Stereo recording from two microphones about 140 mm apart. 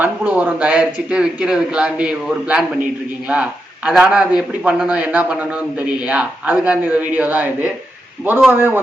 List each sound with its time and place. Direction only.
0.0 s speech: 10° right (ahead or behind)